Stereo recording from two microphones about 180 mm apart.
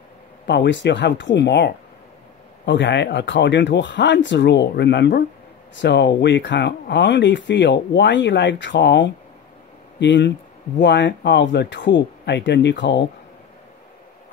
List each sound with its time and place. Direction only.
0.5 s speech: 80° left